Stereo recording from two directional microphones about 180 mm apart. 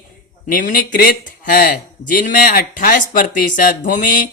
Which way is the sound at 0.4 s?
45° left (ahead or behind).